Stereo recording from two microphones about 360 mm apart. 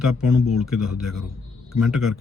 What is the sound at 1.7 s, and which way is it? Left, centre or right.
Speech, centre.